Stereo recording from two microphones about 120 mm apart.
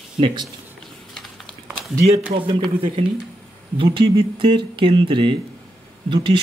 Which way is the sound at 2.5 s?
50° right (ahead or behind).